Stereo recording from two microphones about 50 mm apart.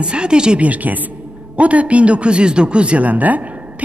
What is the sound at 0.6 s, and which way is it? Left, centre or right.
A man's voice, right.